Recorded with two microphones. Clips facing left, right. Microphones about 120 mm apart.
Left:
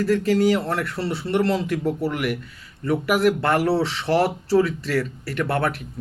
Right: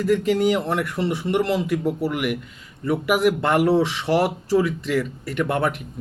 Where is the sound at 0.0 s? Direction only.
15° right (ahead or behind).